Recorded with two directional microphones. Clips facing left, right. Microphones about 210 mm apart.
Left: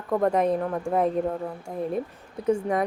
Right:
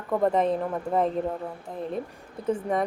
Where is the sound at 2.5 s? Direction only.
5° left (ahead or behind).